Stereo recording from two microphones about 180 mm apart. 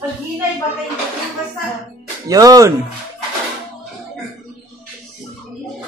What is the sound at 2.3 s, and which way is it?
Speech, 20° right (ahead or behind).